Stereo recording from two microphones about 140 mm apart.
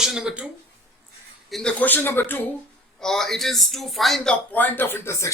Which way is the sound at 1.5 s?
5° left (ahead or behind).